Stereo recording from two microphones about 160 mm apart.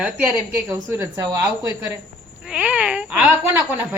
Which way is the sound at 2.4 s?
10° right (ahead or behind).